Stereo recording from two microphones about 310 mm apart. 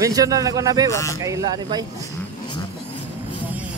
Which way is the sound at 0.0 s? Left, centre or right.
Centre.